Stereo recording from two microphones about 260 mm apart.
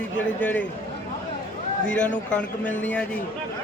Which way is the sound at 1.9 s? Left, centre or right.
Centre.